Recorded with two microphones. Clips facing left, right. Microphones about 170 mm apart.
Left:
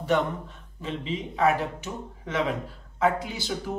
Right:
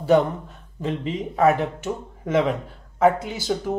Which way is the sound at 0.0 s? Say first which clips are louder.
Right 7 dB; 40° right (ahead or behind).